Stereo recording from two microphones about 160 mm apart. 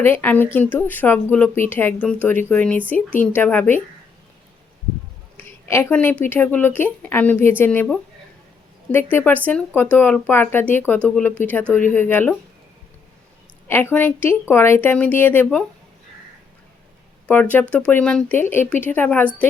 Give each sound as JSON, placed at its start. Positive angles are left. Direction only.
{"t": 0.0, "sound": "speech", "side_deg": 10}
{"t": 5.6, "sound": "a woman's voice", "side_deg": 15}
{"t": 8.9, "sound": "speech", "side_deg": 15}
{"t": 13.7, "sound": "speech", "side_deg": 15}
{"t": 17.2, "sound": "speech", "side_deg": 10}